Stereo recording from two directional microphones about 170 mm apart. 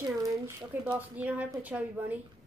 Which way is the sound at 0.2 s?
20° right (ahead or behind).